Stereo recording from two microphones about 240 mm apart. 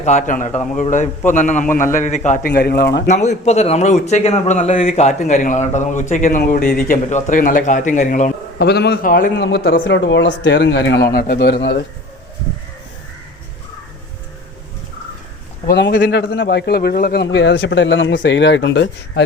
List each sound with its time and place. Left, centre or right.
0.0 s a man's voice: left
3.1 s a man's voice: left
15.6 s a man's voice: left